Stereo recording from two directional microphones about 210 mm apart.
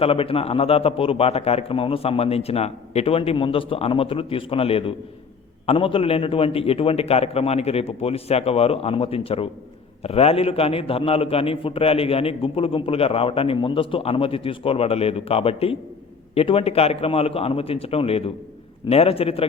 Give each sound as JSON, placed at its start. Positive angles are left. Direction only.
{"t": 0.0, "sound": "a man's voice", "side_deg": 25}